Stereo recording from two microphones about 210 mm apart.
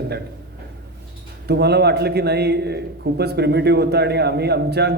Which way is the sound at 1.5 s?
50° right (ahead or behind).